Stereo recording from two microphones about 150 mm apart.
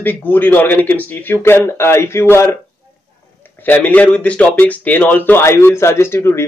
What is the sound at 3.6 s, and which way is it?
Speech, 10° left (ahead or behind).